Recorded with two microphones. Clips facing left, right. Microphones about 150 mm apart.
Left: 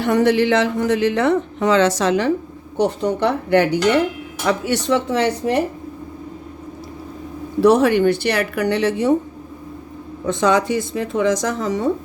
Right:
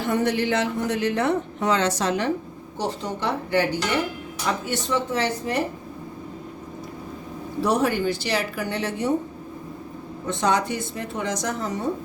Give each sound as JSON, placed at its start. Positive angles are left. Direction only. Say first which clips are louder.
{"t": 0.0, "sound": "speech", "louder": "left 7 dB", "side_deg": 85}
{"t": 2.7, "sound": "speech", "louder": "left 9 dB", "side_deg": 60}
{"t": 7.6, "sound": "speech", "louder": "left 9 dB", "side_deg": 80}
{"t": 10.2, "sound": "speech", "louder": "left 6 dB", "side_deg": 90}